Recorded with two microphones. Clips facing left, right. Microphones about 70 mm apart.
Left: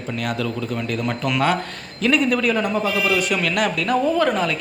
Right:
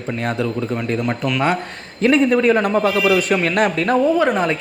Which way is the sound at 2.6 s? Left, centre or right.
Right.